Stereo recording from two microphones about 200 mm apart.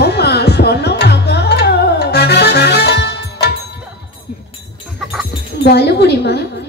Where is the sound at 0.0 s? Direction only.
55° left (ahead or behind).